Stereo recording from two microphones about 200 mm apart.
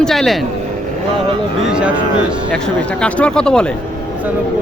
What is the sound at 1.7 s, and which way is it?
Speech, 5° right (ahead or behind).